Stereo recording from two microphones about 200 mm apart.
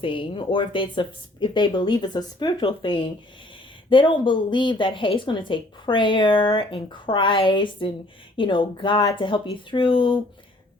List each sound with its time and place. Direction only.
0.0 s a woman's voice: 25° left (ahead or behind)